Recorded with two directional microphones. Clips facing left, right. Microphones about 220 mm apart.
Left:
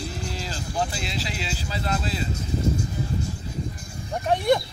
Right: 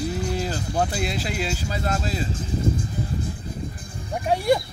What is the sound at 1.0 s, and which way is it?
Speech, 50° right (ahead or behind).